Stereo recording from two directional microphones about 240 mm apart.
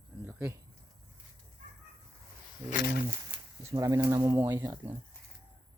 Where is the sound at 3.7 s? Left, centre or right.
Centre.